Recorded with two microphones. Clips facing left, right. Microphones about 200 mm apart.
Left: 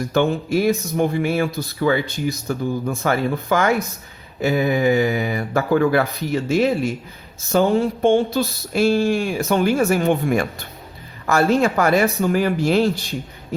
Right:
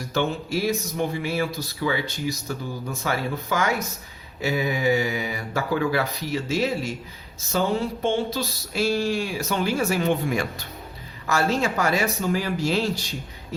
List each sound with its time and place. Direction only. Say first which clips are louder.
0.1 s speech: left 5 dB; 55° left (ahead or behind)